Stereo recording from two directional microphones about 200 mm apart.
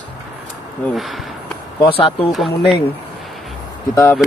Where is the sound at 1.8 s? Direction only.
25° left (ahead or behind).